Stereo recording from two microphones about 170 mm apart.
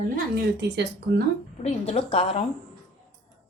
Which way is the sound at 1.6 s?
40° left (ahead or behind).